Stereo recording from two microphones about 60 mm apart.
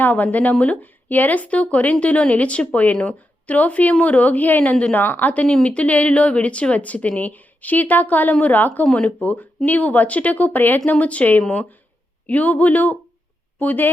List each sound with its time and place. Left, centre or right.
0.0 s a woman's voice: left
8.9 s a woman's voice: centre